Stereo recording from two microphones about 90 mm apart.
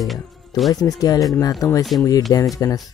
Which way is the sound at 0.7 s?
45° left (ahead or behind).